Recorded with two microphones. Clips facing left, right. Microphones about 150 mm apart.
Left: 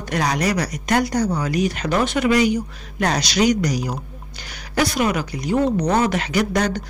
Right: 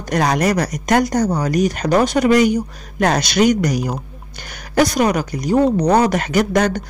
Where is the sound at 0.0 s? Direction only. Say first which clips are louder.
Right 4 dB; 45° right (ahead or behind).